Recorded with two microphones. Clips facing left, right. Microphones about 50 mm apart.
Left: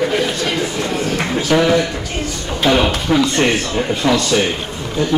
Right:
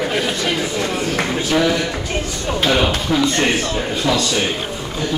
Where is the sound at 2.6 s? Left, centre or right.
Centre.